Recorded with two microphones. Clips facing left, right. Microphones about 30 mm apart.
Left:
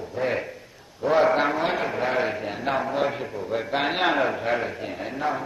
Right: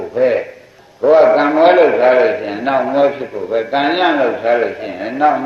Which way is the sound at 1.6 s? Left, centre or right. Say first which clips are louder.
Right 17 dB; right.